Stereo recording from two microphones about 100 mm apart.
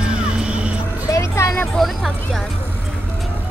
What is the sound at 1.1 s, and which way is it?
Music, 30° left (ahead or behind).